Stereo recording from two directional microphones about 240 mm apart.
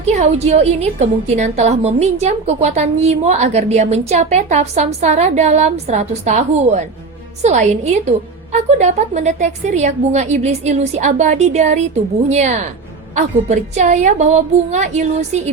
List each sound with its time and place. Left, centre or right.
0.0 s a woman's voice: right